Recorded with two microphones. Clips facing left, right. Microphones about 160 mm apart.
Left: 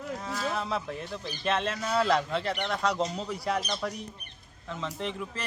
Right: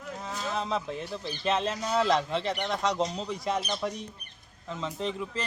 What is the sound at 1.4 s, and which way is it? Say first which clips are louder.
Speech: right 1 dB; 5° right (ahead or behind).